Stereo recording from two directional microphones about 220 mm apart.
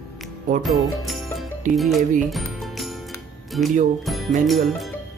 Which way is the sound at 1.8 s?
Centre (ahead or behind).